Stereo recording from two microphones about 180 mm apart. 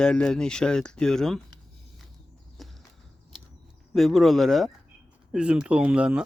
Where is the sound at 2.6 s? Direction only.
Centre (ahead or behind).